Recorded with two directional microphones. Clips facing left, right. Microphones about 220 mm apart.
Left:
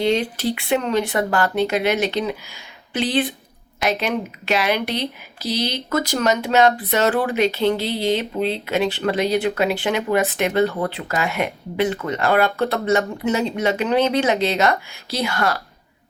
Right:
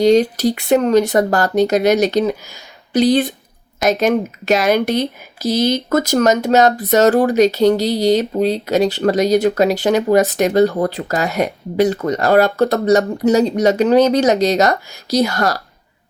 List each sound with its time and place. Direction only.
0.0 s speech: 40° right (ahead or behind)